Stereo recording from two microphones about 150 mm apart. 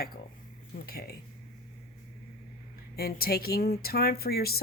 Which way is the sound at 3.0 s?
90° left.